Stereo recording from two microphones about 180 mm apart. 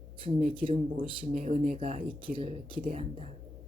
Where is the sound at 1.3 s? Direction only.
45° right (ahead or behind).